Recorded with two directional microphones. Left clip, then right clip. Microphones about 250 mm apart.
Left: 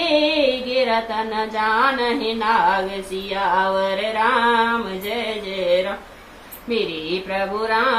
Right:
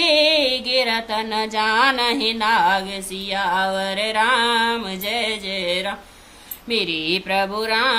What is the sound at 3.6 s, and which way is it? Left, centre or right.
Music, right.